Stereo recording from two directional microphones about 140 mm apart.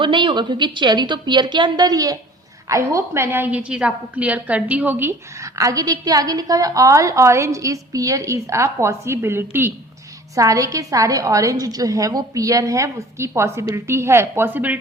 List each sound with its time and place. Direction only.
0.0 s a woman's voice: 35° right (ahead or behind); by 14.8 s 10° right (ahead or behind)